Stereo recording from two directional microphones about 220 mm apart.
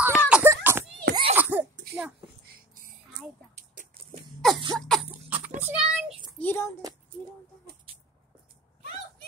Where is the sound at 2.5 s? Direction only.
40° right (ahead or behind).